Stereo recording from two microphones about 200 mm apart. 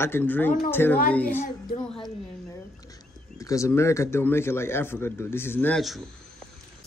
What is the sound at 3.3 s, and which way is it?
A man's voice, 15° left (ahead or behind).